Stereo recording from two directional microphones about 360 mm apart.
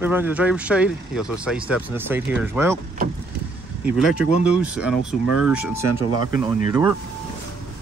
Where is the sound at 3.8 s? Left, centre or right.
Centre.